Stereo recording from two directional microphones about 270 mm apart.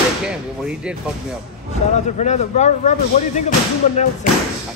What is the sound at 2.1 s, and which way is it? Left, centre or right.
Speech, left.